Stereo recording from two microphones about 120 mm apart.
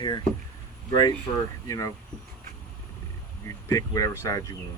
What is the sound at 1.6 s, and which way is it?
Speech, 25° left (ahead or behind).